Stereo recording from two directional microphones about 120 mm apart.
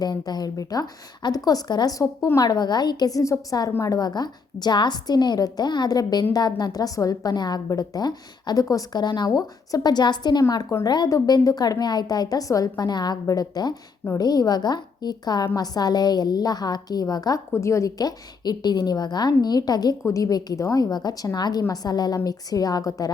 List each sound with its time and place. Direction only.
0.0 s a woman's voice: 35° left (ahead or behind)